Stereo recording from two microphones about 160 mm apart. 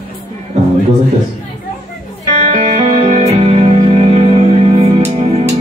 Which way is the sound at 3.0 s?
40° right (ahead or behind).